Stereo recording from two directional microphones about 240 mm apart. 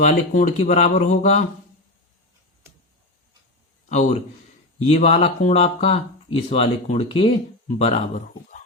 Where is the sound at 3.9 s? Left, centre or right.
Left.